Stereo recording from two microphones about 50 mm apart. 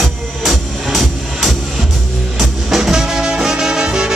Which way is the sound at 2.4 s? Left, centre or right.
Centre.